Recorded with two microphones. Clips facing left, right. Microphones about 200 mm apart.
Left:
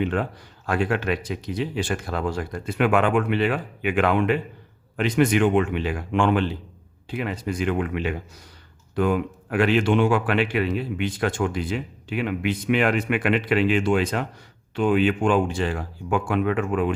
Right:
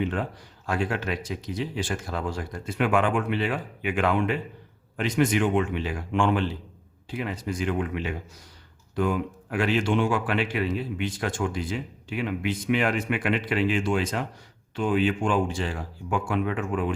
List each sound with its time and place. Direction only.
0.0 s a man's voice: 65° left (ahead or behind)